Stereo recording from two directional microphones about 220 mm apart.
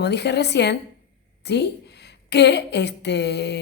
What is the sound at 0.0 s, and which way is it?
A woman's voice, 50° left (ahead or behind).